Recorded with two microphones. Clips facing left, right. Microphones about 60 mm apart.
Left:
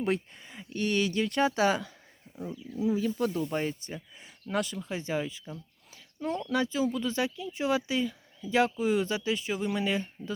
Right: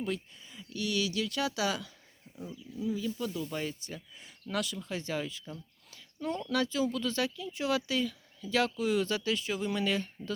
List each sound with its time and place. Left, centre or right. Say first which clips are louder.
0.0 s speech: left 6 dB; left
0.6 s speech: left 4 dB; left
2.5 s speech: left 6 dB; left
2.9 s speech: left 6 dB; left
5.9 s a sound: left 2 dB; centre
6.5 s speech: left 2 dB; left